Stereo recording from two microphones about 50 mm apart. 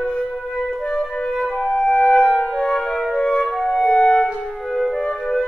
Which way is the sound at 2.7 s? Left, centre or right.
Centre.